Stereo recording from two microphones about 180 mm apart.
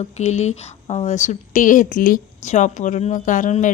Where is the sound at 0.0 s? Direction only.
40° left (ahead or behind).